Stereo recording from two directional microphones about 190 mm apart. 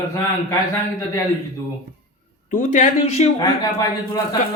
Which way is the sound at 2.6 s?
40° left (ahead or behind).